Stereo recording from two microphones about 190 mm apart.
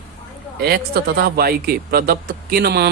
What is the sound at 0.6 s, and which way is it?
A man's voice, 55° right (ahead or behind).